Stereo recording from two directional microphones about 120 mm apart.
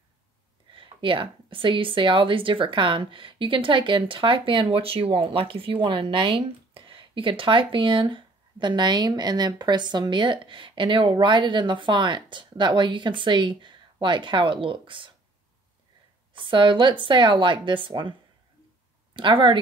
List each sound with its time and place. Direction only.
0.7 s a woman's voice: 45° right (ahead or behind)
16.3 s a woman's voice: 45° right (ahead or behind)
19.1 s a woman's voice: 45° right (ahead or behind)